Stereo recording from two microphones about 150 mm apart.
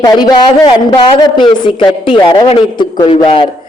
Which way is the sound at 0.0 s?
30° left (ahead or behind).